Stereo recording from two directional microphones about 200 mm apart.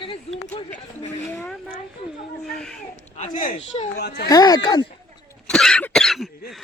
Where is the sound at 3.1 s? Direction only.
40° left (ahead or behind).